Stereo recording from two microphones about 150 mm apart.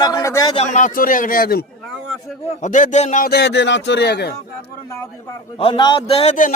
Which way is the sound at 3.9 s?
90° left.